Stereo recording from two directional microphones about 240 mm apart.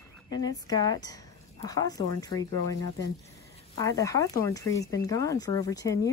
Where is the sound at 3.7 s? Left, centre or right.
Centre.